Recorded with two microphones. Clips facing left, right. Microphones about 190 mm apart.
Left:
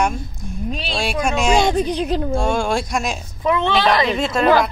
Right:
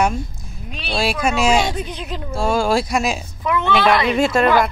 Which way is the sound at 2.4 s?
5° right (ahead or behind).